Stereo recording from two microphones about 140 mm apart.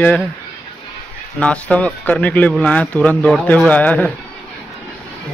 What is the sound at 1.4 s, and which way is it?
Speech, 10° left (ahead or behind).